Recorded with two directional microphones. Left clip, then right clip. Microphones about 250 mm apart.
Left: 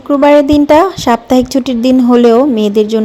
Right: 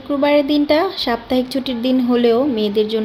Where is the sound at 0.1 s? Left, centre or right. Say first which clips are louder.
Left 8 dB; left.